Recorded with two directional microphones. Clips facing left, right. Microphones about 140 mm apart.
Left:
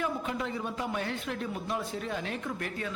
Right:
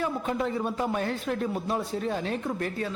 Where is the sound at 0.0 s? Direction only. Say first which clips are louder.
Right 4 dB; 40° right (ahead or behind).